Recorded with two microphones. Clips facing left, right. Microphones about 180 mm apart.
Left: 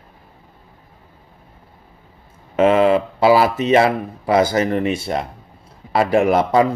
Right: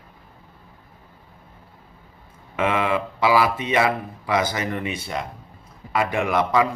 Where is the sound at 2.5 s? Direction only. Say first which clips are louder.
Left 9 dB; 30° left (ahead or behind).